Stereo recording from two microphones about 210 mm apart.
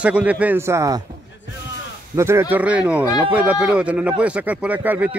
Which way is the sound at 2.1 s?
10° right (ahead or behind).